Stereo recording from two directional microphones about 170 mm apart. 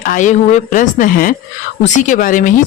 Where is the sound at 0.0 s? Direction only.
50° left (ahead or behind).